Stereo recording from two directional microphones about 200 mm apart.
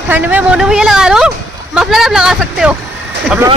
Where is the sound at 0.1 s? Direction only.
10° right (ahead or behind).